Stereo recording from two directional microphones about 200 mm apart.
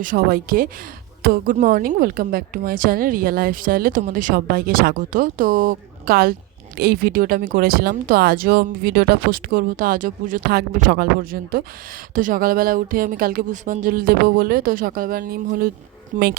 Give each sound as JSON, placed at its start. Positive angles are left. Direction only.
{"t": 0.0, "sound": "a woman's voice", "side_deg": -45}